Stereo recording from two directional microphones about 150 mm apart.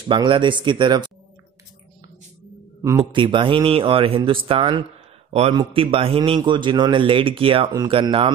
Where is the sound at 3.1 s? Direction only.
30° right (ahead or behind).